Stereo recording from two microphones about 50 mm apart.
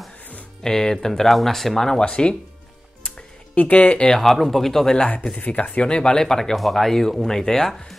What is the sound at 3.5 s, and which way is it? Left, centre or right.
Speech, left.